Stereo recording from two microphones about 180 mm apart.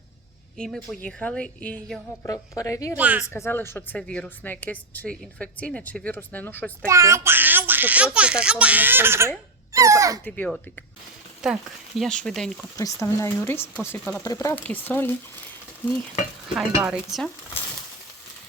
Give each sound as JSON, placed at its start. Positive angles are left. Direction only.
{"t": 0.5, "sound": "a woman's voice", "side_deg": 5}
{"t": 2.3, "sound": "speech", "side_deg": 20}
{"t": 3.0, "sound": "a child's voice", "side_deg": -10}
{"t": 3.2, "sound": "speech", "side_deg": 15}
{"t": 6.8, "sound": "a child's voice", "side_deg": -15}
{"t": 10.2, "sound": "speech", "side_deg": 10}
{"t": 11.4, "sound": "a woman's voice", "side_deg": -5}
{"t": 12.7, "sound": "speech", "side_deg": 20}
{"t": 16.6, "sound": "a woman's voice", "side_deg": -5}